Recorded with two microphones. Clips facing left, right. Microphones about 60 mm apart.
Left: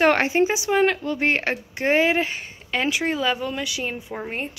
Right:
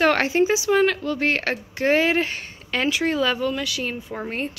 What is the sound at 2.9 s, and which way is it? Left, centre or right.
A woman's voice, left.